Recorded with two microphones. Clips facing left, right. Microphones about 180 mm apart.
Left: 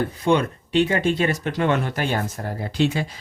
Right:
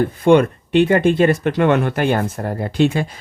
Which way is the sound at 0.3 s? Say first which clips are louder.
Right 8 dB; 55° right (ahead or behind).